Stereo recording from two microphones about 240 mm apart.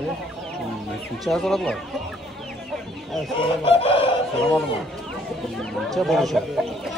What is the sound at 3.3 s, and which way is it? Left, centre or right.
Chicken, left.